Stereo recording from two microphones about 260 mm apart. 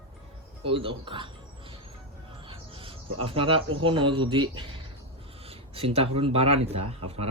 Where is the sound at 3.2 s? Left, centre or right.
Right.